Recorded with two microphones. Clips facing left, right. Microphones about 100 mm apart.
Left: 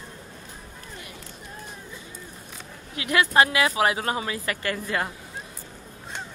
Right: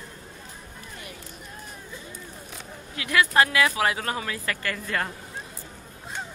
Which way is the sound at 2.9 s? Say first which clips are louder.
Left 1 dB; 25° left (ahead or behind).